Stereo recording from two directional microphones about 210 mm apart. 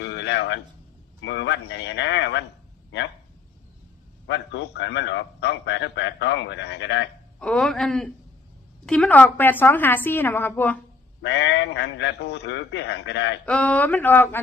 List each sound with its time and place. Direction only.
0.0 s a sound: 55° left (ahead or behind)
1.2 s a man's voice: 55° left (ahead or behind)
4.3 s a man's voice: 55° left (ahead or behind)
7.3 s a man's voice: 5° left (ahead or behind)
11.2 s a man's voice: 55° left (ahead or behind)
13.4 s a woman's voice: 5° left (ahead or behind)